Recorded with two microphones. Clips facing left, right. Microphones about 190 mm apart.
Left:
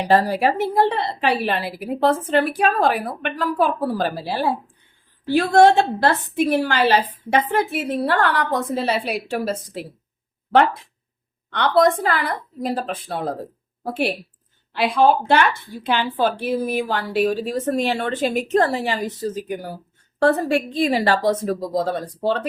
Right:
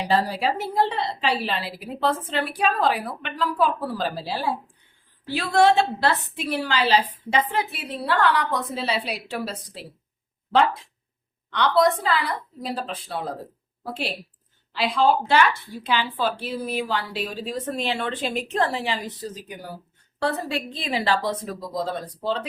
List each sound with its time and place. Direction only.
0.0 s a woman's voice: 55° left (ahead or behind)
11.5 s a woman's voice: 50° left (ahead or behind)